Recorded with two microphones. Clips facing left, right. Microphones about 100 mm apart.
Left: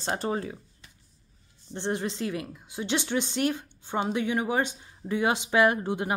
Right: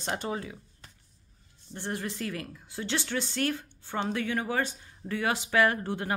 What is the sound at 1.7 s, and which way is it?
A woman's voice, 20° left (ahead or behind).